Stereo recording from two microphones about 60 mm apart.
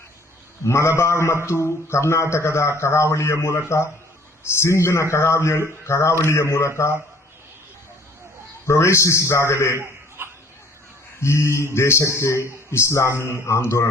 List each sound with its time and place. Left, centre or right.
0.6 s a man's voice: left
8.6 s a man's voice: left
10.2 s a sound: right
11.2 s a man's voice: left